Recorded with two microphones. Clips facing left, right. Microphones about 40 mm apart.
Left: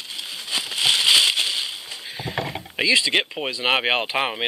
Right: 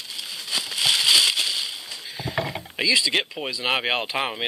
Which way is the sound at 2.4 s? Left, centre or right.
Centre.